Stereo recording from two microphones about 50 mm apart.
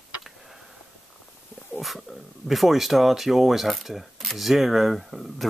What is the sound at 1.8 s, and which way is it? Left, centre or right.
Speech, centre.